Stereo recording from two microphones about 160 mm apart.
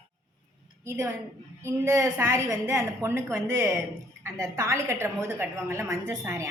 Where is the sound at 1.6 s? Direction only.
15° right (ahead or behind).